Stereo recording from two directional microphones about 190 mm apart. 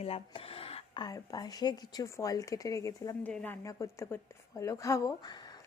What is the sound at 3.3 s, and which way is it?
Speech, 5° left (ahead or behind).